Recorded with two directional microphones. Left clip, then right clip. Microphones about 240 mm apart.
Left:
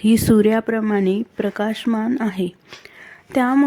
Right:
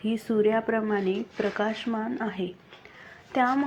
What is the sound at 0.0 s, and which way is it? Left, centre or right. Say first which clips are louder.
Speech: left 9 dB; left.